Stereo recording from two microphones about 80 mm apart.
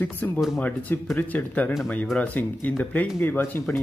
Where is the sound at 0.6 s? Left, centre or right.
Left.